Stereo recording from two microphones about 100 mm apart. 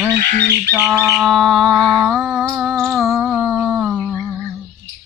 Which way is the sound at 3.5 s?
10° right (ahead or behind).